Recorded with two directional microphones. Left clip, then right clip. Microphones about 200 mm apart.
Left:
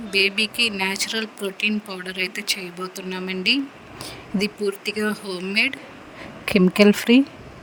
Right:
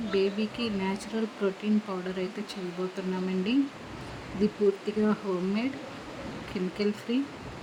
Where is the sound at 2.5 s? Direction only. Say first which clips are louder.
Left 14 dB; 55° left (ahead or behind).